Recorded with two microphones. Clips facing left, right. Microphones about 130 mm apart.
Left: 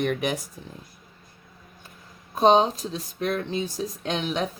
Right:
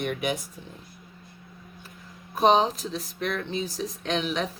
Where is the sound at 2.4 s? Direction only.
30° left (ahead or behind).